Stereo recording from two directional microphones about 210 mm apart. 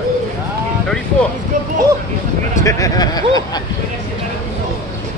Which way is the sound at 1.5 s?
35° right (ahead or behind).